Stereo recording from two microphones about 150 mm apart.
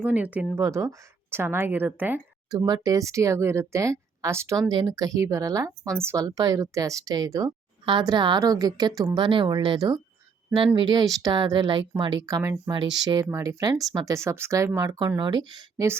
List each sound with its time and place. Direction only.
0.0 s speech: 10° right (ahead or behind)
2.5 s a woman's voice: 25° right (ahead or behind)
9.2 s a woman's voice: 35° right (ahead or behind)